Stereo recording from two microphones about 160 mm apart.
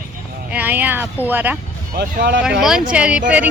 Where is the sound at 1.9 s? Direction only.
75° right (ahead or behind); by 2.4 s 90° right.